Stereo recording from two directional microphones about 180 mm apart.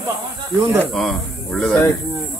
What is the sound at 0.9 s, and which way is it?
Speech, centre (ahead or behind).